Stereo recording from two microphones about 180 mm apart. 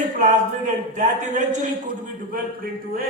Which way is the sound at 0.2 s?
45° right (ahead or behind).